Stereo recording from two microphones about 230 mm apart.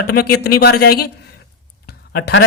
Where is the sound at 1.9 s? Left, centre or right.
Left.